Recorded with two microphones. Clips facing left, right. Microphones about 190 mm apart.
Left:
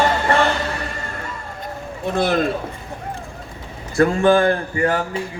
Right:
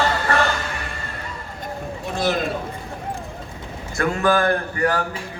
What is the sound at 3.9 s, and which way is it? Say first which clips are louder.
Speech: left 5 dB; 25° left (ahead or behind).